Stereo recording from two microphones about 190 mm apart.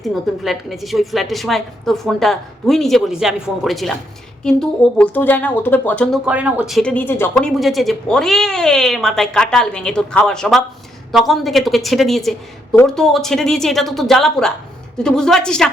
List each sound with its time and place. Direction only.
0.0 s speech: centre (ahead or behind)
6.2 s speech: 5° right (ahead or behind)